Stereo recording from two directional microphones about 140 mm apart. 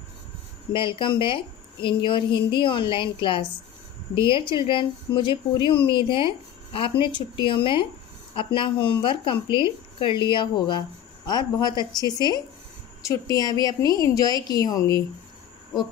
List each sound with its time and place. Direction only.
0.7 s a woman's voice: 35° left (ahead or behind)